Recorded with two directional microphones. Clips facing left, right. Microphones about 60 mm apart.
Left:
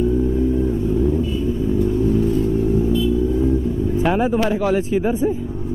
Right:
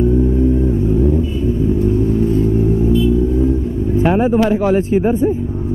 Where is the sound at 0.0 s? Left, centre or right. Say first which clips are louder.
Right 4 dB; right.